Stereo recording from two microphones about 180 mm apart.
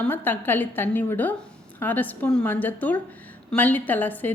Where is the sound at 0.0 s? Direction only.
10° left (ahead or behind).